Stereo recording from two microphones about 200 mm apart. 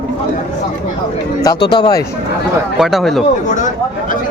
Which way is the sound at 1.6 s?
20° left (ahead or behind).